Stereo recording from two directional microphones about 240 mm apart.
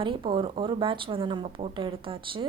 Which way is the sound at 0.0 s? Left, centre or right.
Right.